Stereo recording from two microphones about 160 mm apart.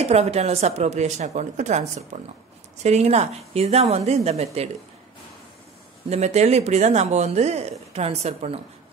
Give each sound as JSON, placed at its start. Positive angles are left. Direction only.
{"t": 0.0, "sound": "a woman's voice", "side_deg": -40}
{"t": 6.0, "sound": "a woman's voice", "side_deg": -45}